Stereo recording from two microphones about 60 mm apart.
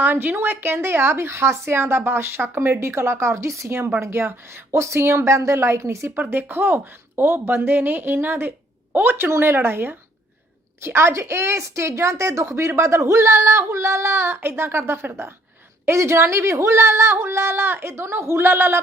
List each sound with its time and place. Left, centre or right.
0.0 s a woman's voice: right
4.7 s a woman's voice: right
6.1 s a woman's voice: right
10.8 s a woman's voice: right